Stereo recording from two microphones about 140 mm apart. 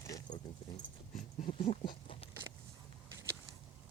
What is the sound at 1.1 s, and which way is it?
Dog, 65° left (ahead or behind).